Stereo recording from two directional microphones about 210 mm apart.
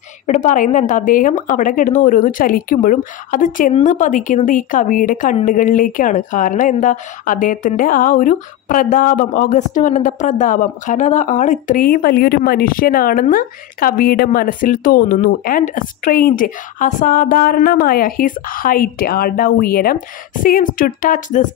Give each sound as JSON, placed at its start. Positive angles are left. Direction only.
{"t": 0.3, "sound": "speech", "side_deg": 35}